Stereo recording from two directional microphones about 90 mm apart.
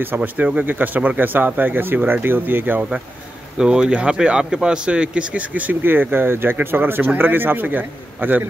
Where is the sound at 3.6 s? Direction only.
10° right (ahead or behind).